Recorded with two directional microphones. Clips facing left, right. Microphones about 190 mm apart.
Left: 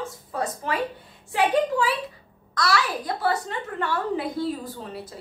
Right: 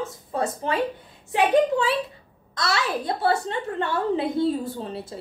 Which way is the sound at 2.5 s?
25° right (ahead or behind).